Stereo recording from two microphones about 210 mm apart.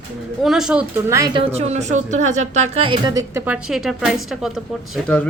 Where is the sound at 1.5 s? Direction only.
30° right (ahead or behind).